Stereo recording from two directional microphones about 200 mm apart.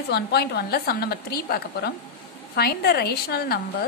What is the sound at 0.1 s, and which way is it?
A woman's voice, 55° left (ahead or behind).